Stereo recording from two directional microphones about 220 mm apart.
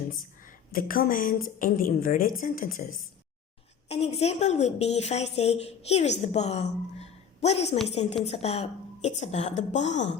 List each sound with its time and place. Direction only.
0.7 s a woman's voice: 40° left (ahead or behind)
3.8 s a woman's voice: 30° left (ahead or behind)
7.0 s a sound: 30° left (ahead or behind)
8.2 s a woman's voice: 30° left (ahead or behind)